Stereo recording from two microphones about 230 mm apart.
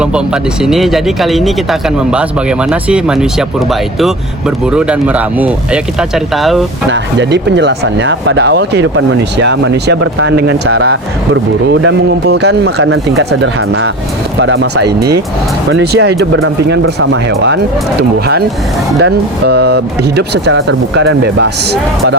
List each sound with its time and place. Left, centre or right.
0.6 s speech: centre
6.9 s speech: right
10.0 s speech: right
10.3 s speech: right
19.0 s speech: right